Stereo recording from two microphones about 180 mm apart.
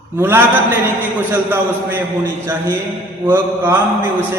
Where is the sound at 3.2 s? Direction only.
15° right (ahead or behind).